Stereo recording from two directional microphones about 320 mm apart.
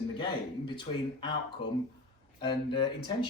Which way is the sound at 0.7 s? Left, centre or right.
Centre.